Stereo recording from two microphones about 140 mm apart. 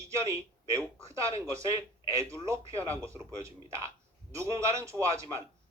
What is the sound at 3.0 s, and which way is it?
Speech, 20° right (ahead or behind).